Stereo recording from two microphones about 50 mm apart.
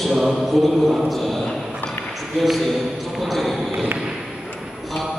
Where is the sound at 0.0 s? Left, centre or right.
Centre.